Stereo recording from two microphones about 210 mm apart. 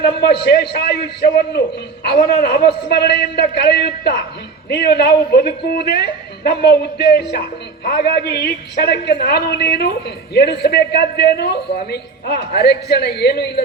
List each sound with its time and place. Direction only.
0.0 s a man's voice: 50° left (ahead or behind)